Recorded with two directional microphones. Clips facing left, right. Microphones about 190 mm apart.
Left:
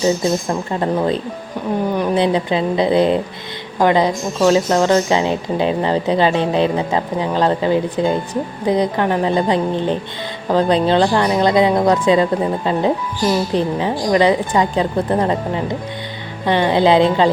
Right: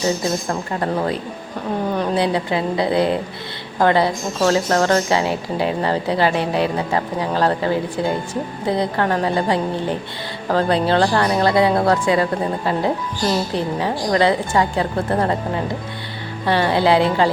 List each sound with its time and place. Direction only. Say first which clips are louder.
0.4 s speech: left 3 dB; 20° left (ahead or behind)